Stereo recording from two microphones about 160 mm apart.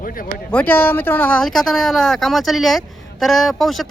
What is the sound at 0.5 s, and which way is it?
Speech, 10° left (ahead or behind).